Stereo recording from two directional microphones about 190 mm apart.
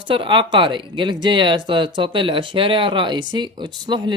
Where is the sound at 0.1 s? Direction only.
25° right (ahead or behind).